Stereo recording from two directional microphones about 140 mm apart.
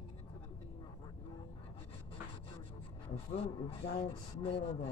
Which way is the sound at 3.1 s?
45° left (ahead or behind).